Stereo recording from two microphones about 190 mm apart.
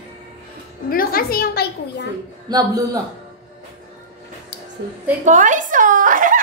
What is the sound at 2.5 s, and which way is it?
Speech, 20° right (ahead or behind).